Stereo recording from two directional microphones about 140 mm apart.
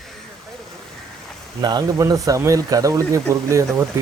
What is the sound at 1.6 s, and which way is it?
Speech, 30° right (ahead or behind).